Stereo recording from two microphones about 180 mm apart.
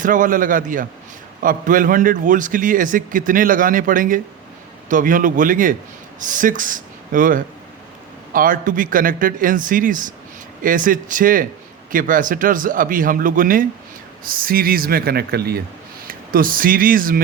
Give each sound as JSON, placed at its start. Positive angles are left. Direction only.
{"t": 0.0, "sound": "a man's voice", "side_deg": -45}